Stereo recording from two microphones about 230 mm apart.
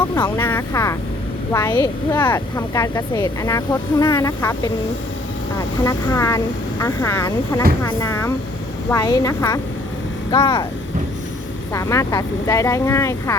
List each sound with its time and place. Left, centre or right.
0.1 s speech: centre
11.7 s speech: centre